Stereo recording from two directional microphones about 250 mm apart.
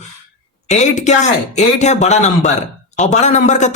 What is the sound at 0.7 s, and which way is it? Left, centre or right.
A man's voice, left.